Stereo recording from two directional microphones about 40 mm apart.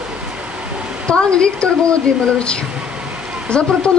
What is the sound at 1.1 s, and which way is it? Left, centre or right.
A woman's voice, left.